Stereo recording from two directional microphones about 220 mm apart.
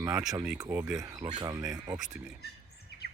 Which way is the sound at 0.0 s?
15° right (ahead or behind).